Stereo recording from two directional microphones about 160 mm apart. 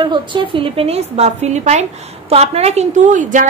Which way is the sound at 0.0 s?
30° right (ahead or behind).